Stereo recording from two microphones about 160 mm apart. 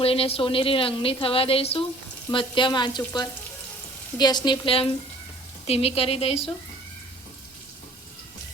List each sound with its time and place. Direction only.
0.0 s a woman's voice: 35° left (ahead or behind)
2.3 s frying: 30° left (ahead or behind)
5.6 s a woman's voice: 40° left (ahead or behind)